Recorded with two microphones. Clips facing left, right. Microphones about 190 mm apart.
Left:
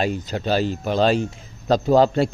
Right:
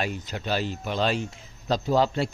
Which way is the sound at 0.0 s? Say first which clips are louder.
Left 7 dB; 35° left (ahead or behind).